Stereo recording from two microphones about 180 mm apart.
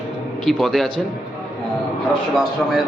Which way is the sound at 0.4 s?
Centre (ahead or behind).